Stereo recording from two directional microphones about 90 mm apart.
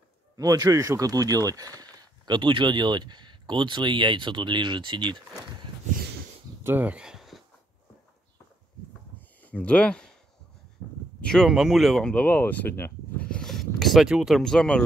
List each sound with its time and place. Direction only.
0.4 s speech: 40° right (ahead or behind); by 5.2 s 55° right (ahead or behind)
6.6 s a sound: 20° right (ahead or behind); by 7.4 s centre (ahead or behind)
9.4 s speech: 15° left (ahead or behind)
10.8 s speech: 40° left (ahead or behind)
11.1 s speech: 10° left (ahead or behind)
11.4 s speech: 5° right (ahead or behind)
12.0 s speech: 15° left (ahead or behind)
13.2 s a sound: 10° left (ahead or behind)
14.0 s speech: 5° right (ahead or behind)